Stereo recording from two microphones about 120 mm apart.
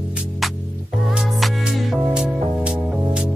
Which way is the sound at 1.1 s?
Centre (ahead or behind).